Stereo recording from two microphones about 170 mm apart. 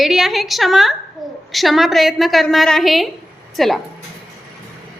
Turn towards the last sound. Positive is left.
turn(degrees=0)  # may be behind; listen again after turning